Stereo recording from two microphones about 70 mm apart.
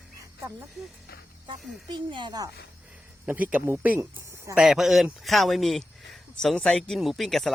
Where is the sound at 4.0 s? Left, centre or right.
Right.